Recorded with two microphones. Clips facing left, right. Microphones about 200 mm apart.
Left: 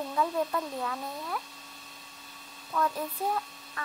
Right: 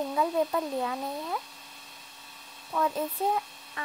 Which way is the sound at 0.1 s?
20° right (ahead or behind).